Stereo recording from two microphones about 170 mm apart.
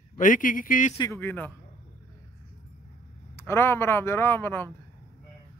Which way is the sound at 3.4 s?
15° left (ahead or behind).